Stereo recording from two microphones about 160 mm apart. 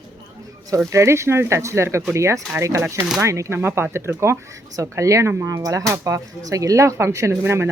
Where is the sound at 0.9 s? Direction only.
15° right (ahead or behind).